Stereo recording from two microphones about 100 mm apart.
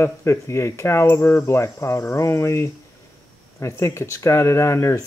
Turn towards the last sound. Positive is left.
turn(degrees=30)  # may be behind; listen again after turning